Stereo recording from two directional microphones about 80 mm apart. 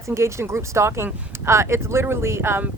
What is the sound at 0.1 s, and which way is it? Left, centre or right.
Speech, right.